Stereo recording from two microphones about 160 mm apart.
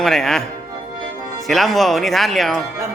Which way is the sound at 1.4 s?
Centre (ahead or behind).